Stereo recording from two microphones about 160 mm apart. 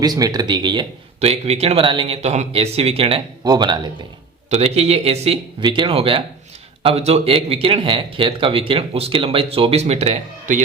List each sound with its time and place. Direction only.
0.0 s speech: 25° right (ahead or behind)
1.2 s speech: 40° right (ahead or behind)
3.4 s speech: 25° right (ahead or behind)
4.4 s speech: 40° right (ahead or behind)